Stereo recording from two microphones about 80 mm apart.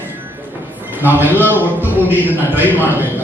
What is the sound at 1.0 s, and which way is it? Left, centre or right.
Speech, right.